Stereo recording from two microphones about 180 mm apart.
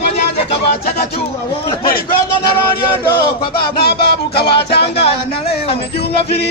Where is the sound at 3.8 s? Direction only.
60° left (ahead or behind).